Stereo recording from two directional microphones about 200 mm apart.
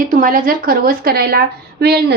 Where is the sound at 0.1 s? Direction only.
45° right (ahead or behind).